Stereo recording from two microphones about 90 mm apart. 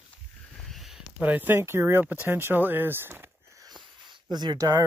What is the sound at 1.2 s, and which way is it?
Speech, 20° right (ahead or behind).